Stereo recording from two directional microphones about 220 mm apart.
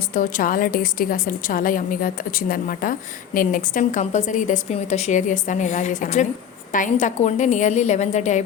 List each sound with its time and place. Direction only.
0.1 s a woman's voice: 35° left (ahead or behind)